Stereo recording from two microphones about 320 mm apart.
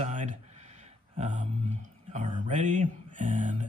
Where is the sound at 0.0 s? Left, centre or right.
Right.